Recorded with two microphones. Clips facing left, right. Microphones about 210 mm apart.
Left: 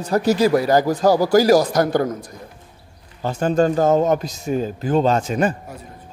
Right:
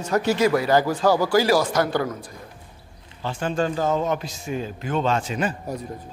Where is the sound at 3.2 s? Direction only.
40° left (ahead or behind).